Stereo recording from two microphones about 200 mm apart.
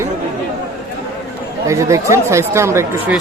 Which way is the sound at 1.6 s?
15° right (ahead or behind).